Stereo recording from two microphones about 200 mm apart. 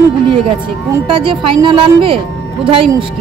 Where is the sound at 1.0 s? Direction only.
25° right (ahead or behind).